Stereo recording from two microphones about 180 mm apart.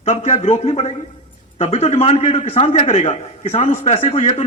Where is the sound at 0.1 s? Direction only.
40° left (ahead or behind).